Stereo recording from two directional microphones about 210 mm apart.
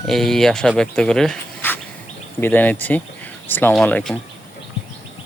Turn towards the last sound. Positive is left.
turn(degrees=5)  # may be behind; listen again after turning